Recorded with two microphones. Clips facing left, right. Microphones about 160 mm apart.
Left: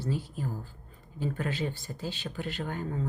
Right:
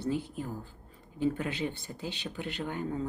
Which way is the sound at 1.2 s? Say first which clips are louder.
Right 2 dB; 20° right (ahead or behind).